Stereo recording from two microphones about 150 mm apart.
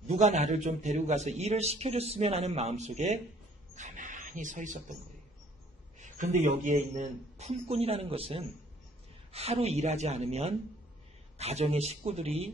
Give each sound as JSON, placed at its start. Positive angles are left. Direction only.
{"t": 0.1, "sound": "a man's voice", "side_deg": -50}
{"t": 5.9, "sound": "a man's voice", "side_deg": -55}